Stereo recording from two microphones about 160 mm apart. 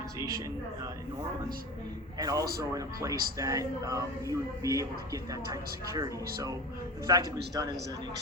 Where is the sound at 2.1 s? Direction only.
25° right (ahead or behind).